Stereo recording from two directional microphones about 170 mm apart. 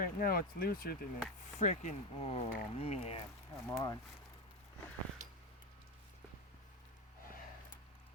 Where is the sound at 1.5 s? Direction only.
45° left (ahead or behind).